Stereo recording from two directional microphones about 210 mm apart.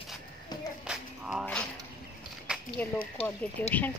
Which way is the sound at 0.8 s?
5° right (ahead or behind).